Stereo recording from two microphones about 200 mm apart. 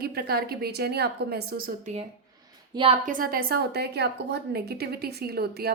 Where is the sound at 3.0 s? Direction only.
45° right (ahead or behind).